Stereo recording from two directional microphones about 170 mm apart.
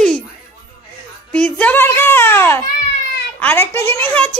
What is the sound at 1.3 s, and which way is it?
Speech, 10° left (ahead or behind).